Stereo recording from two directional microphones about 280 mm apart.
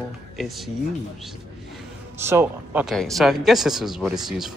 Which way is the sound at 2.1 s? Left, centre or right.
Centre.